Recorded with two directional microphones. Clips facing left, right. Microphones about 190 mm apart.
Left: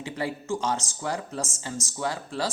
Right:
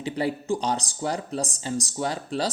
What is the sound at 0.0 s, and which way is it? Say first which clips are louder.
Speech: right 4 dB; 15° right (ahead or behind).